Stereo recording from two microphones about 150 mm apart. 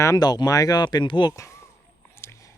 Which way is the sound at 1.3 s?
20° left (ahead or behind).